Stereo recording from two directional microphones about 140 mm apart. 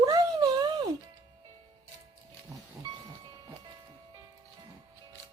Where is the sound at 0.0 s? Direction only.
25° right (ahead or behind).